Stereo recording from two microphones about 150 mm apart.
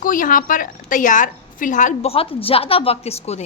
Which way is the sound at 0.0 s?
65° left (ahead or behind).